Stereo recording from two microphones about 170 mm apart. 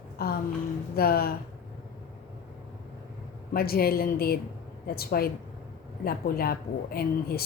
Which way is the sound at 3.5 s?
60° left (ahead or behind).